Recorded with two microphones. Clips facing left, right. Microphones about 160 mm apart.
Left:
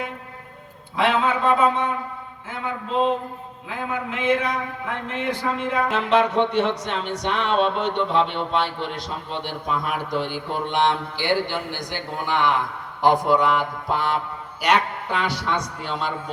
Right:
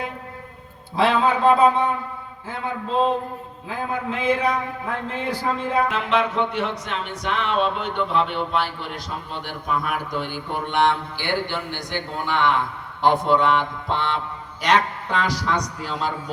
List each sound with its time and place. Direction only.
0.9 s a man's voice: 35° right (ahead or behind)
3.7 s a man's voice: 35° right (ahead or behind)
5.9 s speech: 30° left (ahead or behind)
10.7 s a sound: 20° left (ahead or behind)
14.6 s music: 5° left (ahead or behind)
15.8 s a man's voice: centre (ahead or behind)